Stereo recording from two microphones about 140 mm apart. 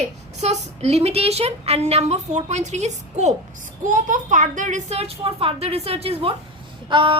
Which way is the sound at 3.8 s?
70° right (ahead or behind).